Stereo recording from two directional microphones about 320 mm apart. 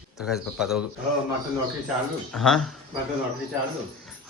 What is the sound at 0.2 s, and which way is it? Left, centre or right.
Speech, centre.